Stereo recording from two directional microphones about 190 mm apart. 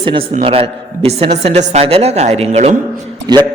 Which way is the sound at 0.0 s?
25° right (ahead or behind).